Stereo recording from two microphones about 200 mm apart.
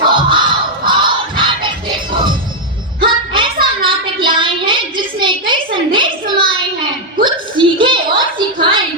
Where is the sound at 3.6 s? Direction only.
25° right (ahead or behind).